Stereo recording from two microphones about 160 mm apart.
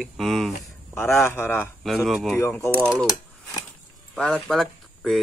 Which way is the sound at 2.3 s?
15° left (ahead or behind).